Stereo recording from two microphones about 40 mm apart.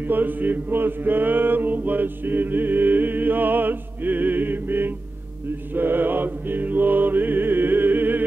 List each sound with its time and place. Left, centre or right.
0.1 s mantra: right